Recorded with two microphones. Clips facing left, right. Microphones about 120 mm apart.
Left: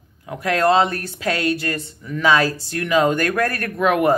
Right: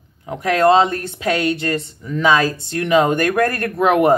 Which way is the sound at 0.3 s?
25° right (ahead or behind).